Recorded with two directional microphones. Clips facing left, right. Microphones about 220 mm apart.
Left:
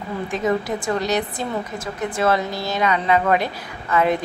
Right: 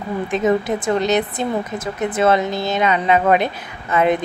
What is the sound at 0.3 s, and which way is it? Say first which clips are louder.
A woman's voice: right 4 dB; 20° right (ahead or behind).